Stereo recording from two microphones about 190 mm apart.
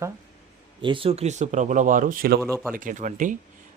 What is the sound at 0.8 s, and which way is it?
Speech, 25° right (ahead or behind).